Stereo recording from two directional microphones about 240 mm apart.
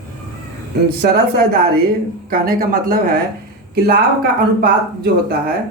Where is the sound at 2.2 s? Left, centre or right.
Right.